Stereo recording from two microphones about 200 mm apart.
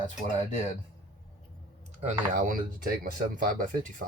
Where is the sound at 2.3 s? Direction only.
40° right (ahead or behind).